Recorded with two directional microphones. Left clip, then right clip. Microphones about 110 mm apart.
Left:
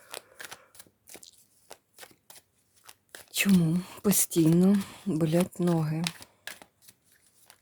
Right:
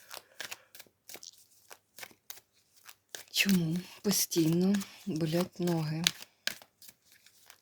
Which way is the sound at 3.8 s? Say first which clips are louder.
Left 3 dB; 50° left (ahead or behind).